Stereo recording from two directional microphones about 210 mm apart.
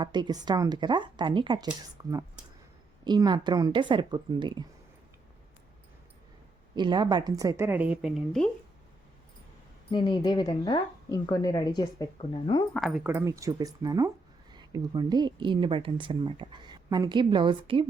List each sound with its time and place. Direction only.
0.0 s a woman's voice: 20° right (ahead or behind)
6.7 s a woman's voice: 20° right (ahead or behind); by 8.4 s centre (ahead or behind)
9.9 s speech: 20° left (ahead or behind)
12.7 s a woman's voice: centre (ahead or behind); by 17.8 s 25° right (ahead or behind)